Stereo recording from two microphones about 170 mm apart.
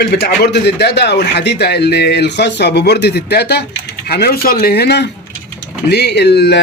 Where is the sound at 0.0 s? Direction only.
75° left (ahead or behind).